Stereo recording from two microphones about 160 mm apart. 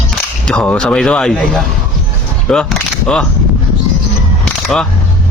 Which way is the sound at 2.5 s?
Centre (ahead or behind).